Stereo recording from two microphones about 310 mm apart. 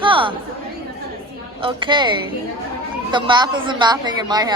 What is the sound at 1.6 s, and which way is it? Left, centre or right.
A woman's voice, centre.